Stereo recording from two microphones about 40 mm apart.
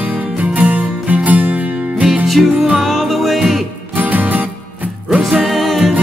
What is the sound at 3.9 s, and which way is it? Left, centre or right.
Music, right.